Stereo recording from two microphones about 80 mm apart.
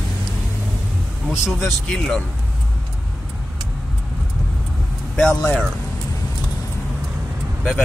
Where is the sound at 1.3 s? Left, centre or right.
Centre.